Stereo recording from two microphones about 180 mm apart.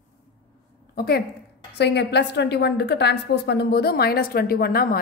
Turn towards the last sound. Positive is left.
turn(degrees=55)  # may be behind; listen again after turning